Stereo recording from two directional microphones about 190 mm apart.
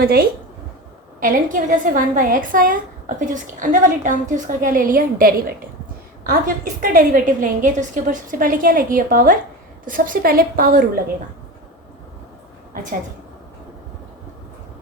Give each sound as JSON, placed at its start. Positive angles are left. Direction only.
{"t": 0.0, "sound": "a woman's voice", "side_deg": -55}